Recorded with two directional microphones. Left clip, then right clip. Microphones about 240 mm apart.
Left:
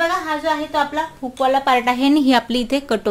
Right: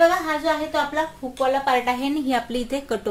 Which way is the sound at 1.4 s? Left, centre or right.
Left.